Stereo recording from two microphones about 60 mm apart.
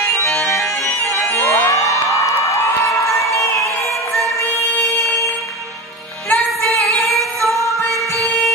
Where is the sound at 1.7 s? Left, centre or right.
Left.